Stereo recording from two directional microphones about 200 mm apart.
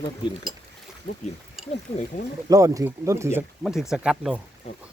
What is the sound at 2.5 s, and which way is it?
Speech, 15° right (ahead or behind).